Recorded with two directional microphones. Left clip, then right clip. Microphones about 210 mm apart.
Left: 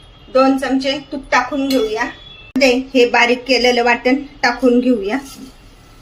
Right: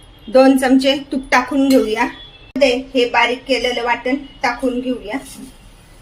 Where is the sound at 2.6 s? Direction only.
40° left (ahead or behind).